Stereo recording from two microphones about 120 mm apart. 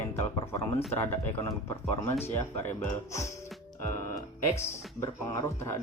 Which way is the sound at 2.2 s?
15° left (ahead or behind).